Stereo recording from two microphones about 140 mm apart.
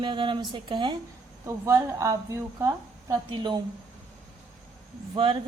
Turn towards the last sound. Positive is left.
turn(degrees=-40)  # may be behind; listen again after turning